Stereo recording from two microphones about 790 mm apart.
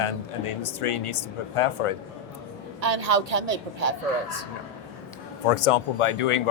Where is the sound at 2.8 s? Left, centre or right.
Right.